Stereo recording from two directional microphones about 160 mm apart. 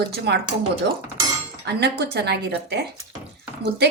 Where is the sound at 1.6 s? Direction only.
90° right.